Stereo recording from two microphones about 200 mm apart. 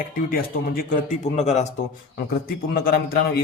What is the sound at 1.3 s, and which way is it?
Speech, 35° left (ahead or behind).